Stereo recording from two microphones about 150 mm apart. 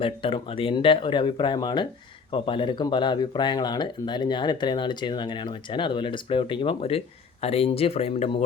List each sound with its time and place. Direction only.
0.0 s speech: 35° left (ahead or behind)